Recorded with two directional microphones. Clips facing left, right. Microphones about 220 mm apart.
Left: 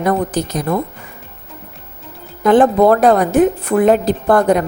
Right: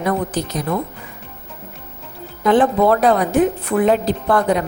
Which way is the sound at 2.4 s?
45° left (ahead or behind).